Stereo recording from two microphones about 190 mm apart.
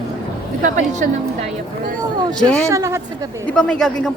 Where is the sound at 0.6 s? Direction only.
40° right (ahead or behind).